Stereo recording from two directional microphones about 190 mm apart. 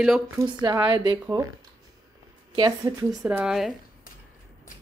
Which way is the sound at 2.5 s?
20° right (ahead or behind).